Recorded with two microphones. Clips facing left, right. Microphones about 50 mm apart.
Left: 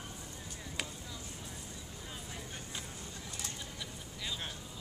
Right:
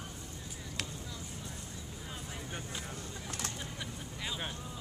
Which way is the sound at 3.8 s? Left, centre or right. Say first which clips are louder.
Right 3 dB; centre.